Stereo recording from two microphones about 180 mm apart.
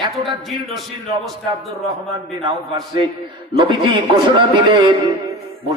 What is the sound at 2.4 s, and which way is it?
Speech, 25° right (ahead or behind).